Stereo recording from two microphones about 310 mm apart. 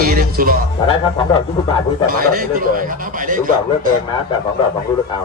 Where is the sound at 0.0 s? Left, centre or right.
Right.